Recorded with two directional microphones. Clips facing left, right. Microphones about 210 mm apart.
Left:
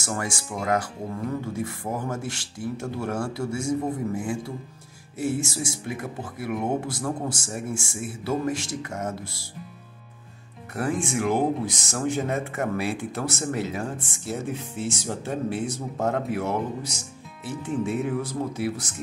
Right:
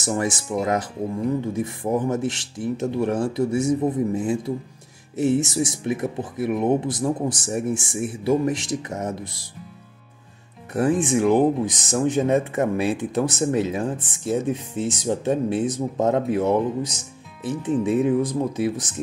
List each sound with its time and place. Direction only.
0.0 s speech: 20° right (ahead or behind)
10.7 s speech: 20° right (ahead or behind)